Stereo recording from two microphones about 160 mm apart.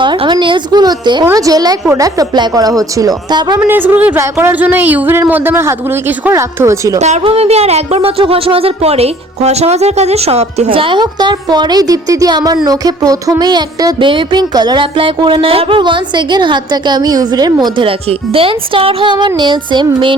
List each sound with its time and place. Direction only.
0.0 s a woman's voice: 30° right (ahead or behind)
1.2 s music: 20° right (ahead or behind)
3.6 s a woman's voice: 10° right (ahead or behind)
7.0 s speech: 40° right (ahead or behind); by 12.5 s 25° right (ahead or behind)
12.6 s music: 20° right (ahead or behind)